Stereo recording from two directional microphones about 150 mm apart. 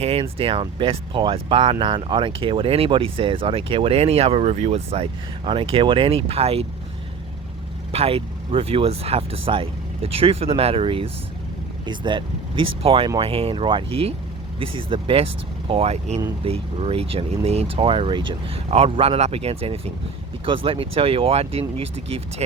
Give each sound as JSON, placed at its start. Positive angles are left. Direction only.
{"t": 0.0, "sound": "speech", "side_deg": -40}
{"t": 7.9, "sound": "speech", "side_deg": -40}